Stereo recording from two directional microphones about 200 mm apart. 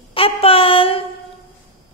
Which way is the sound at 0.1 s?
30° left (ahead or behind).